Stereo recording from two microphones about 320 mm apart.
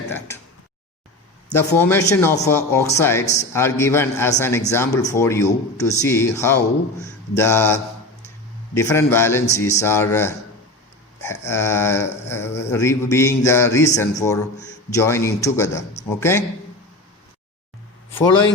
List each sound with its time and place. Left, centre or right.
1.5 s a man's voice: centre